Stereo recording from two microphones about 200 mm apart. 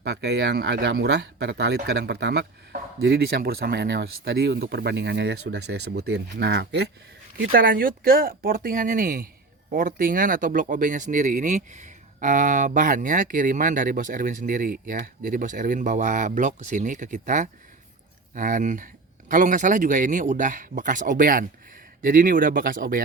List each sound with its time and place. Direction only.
0.1 s speech: 60° right (ahead or behind)
7.3 s speech: 45° right (ahead or behind)